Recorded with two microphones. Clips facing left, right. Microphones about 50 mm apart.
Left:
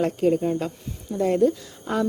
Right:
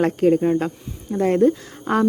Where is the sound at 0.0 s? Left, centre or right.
Right.